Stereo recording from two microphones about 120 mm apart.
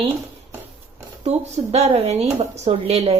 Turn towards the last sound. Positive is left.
turn(degrees=-55)  # may be behind; listen again after turning